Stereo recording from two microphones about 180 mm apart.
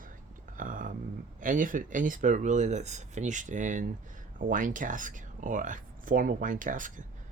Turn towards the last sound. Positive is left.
turn(degrees=-45)  # may be behind; listen again after turning